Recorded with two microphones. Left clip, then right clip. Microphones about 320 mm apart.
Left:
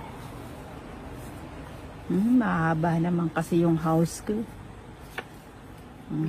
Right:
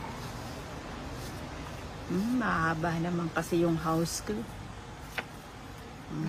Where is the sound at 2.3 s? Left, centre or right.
Centre.